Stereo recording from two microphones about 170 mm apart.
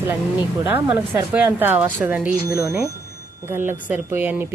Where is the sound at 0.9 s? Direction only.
10° right (ahead or behind).